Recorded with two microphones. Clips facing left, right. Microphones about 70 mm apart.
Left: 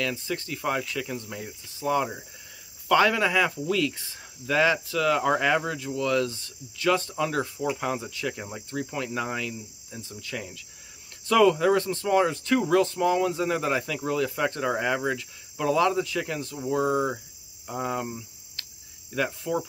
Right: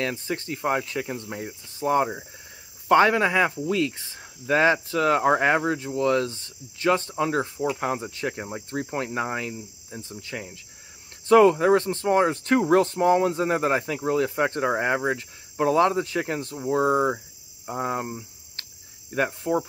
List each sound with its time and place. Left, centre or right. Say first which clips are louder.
0.0 s speech: right 2 dB; right
8.1 s speech: right 2 dB; right
17.6 s cricket: right 2 dB; right